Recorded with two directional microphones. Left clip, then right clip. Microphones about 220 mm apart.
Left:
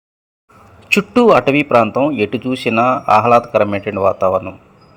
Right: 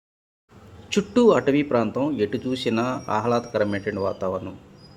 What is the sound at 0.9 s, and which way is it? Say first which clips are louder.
A man's voice: left 8 dB; 15° left (ahead or behind).